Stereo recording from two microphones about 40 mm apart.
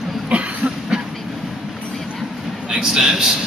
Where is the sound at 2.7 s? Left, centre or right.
Centre.